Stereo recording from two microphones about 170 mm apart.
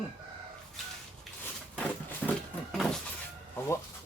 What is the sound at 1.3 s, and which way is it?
Drawer open or close, centre (ahead or behind).